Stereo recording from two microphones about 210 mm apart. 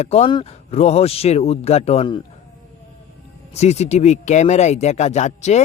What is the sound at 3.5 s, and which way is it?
Speech, 30° left (ahead or behind).